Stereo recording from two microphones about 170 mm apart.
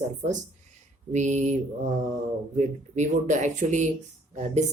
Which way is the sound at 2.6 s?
45° right (ahead or behind).